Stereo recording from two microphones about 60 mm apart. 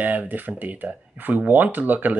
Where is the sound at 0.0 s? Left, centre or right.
Right.